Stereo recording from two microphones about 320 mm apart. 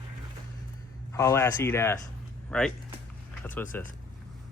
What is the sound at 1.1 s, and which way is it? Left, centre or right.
Speech, centre.